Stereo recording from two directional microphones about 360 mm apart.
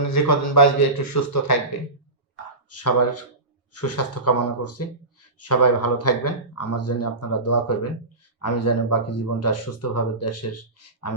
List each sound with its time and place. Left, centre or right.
0.1 s speech: left
2.6 s speech: left